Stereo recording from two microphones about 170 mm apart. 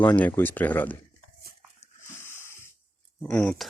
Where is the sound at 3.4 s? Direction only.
5° left (ahead or behind).